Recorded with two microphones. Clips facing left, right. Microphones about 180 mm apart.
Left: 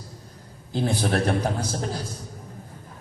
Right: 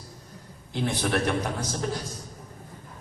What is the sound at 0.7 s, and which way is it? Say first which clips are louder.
Speech: left 3 dB; 35° left (ahead or behind).